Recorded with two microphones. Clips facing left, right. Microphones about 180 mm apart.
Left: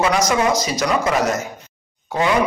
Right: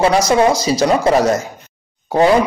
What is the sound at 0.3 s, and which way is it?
A man's voice, 30° right (ahead or behind).